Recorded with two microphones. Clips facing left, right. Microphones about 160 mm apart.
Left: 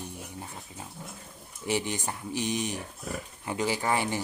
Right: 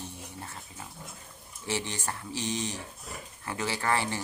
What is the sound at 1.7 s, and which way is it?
Speech, 15° left (ahead or behind).